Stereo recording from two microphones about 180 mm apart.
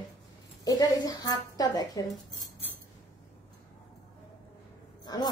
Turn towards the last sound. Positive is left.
turn(degrees=20)  # may be behind; listen again after turning